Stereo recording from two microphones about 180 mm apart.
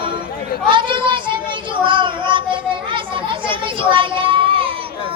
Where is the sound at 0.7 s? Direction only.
25° right (ahead or behind).